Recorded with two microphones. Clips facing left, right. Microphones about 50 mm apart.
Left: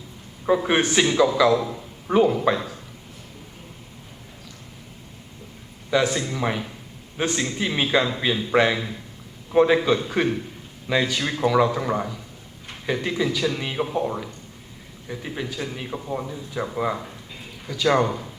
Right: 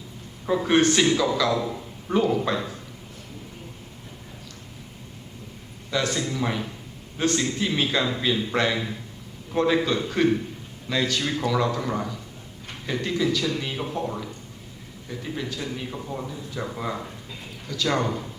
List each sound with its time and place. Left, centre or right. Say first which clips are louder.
0.4 s a man's voice: even; centre
5.9 s speech: left 4 dB; centre